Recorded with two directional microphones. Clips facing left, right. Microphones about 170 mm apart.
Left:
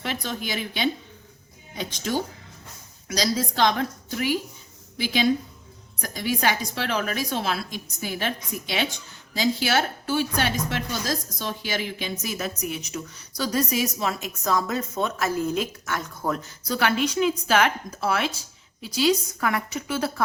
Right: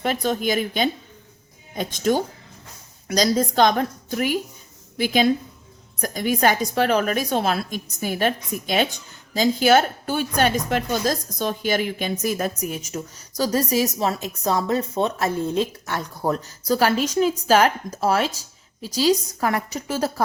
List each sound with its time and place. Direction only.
0.0 s a woman's voice: 45° right (ahead or behind)